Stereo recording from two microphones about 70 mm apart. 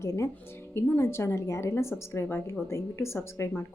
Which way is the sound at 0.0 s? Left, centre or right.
Left.